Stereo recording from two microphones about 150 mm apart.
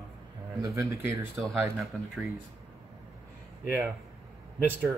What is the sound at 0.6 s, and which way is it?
Speech, 20° right (ahead or behind).